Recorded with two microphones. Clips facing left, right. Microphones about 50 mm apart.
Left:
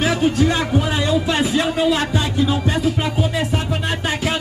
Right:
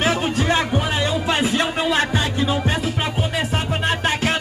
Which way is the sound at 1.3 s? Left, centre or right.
Right.